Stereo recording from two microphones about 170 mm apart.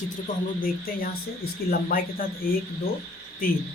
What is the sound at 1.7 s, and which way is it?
Speech, 60° left (ahead or behind).